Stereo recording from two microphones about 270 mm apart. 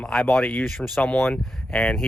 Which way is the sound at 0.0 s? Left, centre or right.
Centre.